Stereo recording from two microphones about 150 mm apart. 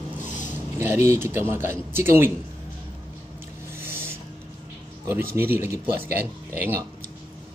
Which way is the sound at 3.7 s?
15° right (ahead or behind).